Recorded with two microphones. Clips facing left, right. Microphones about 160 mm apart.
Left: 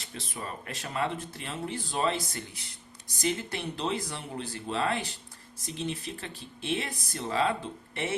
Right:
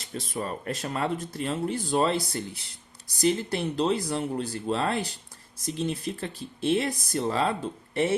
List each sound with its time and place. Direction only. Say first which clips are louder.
0.1 s speech: right 7 dB; 40° right (ahead or behind)